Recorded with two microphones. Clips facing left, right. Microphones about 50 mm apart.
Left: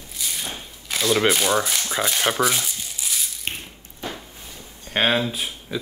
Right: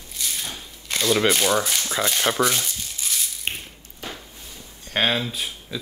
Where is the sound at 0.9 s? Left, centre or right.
Centre.